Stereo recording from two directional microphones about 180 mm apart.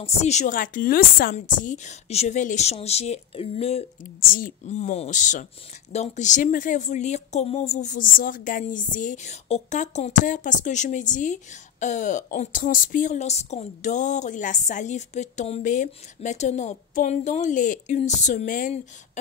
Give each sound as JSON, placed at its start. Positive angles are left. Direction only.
{"t": 0.0, "sound": "a woman's voice", "side_deg": 40}
{"t": 4.0, "sound": "a woman's voice", "side_deg": 55}